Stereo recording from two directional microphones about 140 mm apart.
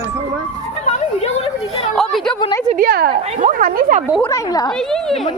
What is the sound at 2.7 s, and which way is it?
Speech, 90° right.